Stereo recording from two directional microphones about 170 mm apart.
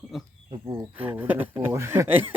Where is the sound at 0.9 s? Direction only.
10° right (ahead or behind).